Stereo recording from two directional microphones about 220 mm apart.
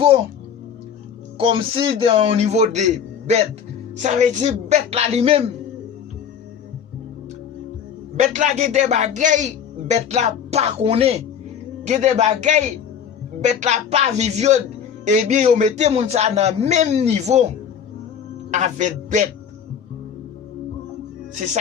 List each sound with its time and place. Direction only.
1.4 s a man's voice: 25° right (ahead or behind)
8.1 s speech: 30° right (ahead or behind)
18.5 s speech: 35° right (ahead or behind)